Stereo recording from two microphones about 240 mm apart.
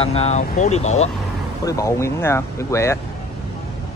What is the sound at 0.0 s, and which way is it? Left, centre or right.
Speech, left.